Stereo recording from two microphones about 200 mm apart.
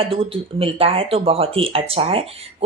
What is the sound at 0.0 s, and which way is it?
Speech, 30° right (ahead or behind).